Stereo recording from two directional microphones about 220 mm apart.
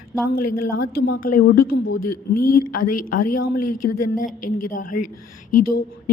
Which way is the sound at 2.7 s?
40° left (ahead or behind).